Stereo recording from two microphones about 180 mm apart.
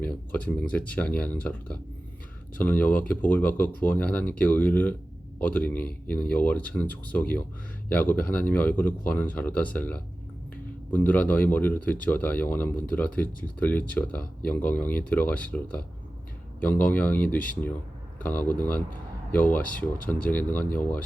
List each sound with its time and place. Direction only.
0.0 s speech: 10° left (ahead or behind)